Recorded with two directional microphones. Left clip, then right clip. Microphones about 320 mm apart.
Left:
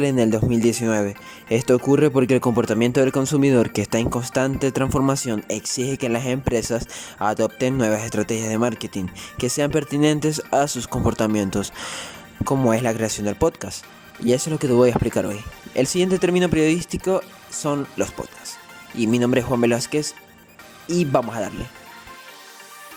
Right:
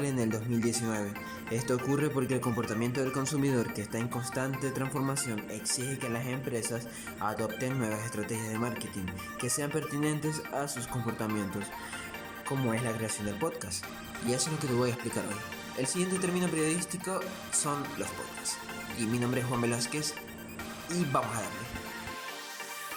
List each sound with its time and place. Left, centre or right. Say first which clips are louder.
0.0 s speech: left 13 dB; left